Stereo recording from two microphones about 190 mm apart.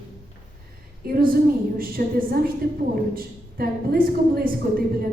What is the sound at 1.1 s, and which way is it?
A woman's voice, 50° right (ahead or behind).